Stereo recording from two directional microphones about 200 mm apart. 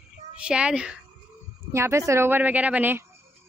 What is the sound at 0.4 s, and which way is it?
A child's voice, 5° right (ahead or behind).